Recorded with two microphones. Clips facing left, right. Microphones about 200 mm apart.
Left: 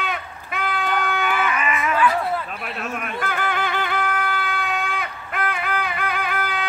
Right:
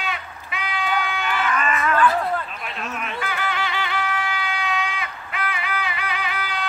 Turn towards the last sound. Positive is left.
turn(degrees=50)  # may be behind; listen again after turning